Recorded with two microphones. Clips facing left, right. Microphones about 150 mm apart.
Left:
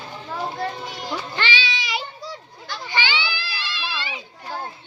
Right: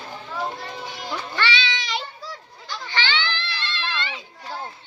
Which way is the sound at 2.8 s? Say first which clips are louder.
Left 1 dB; 10° left (ahead or behind).